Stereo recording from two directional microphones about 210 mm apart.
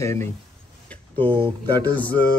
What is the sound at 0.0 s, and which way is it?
Speech, 15° left (ahead or behind).